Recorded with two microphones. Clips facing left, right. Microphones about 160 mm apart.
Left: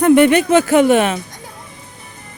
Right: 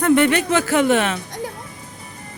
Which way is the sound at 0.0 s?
15° left (ahead or behind).